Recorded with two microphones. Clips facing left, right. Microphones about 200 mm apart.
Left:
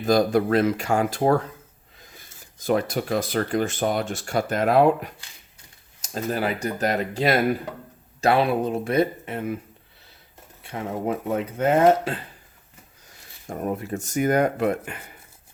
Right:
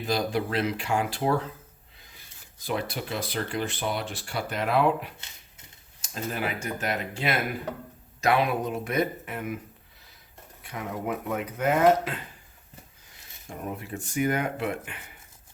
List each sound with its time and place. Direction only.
0.0 s speech: 45° left (ahead or behind); by 9.6 s 30° left (ahead or behind)
10.6 s speech: 30° left (ahead or behind)
13.5 s speech: 45° left (ahead or behind)